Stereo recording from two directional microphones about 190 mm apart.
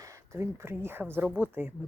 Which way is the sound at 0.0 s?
15° right (ahead or behind).